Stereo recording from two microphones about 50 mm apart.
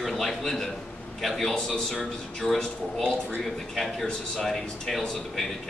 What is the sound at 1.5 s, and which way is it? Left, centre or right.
A man's voice, centre.